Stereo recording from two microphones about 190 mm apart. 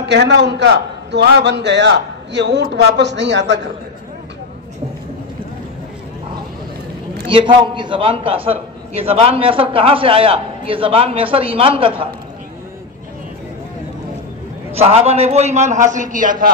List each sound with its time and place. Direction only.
0.0 s a man's voice: 65° right (ahead or behind)
7.2 s a man's voice: 25° right (ahead or behind)
14.7 s a man's voice: 30° right (ahead or behind)